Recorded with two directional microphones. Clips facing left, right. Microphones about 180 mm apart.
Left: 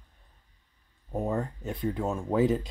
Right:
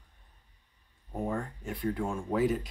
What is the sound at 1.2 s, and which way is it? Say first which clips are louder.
Speech: left 3 dB; 25° left (ahead or behind).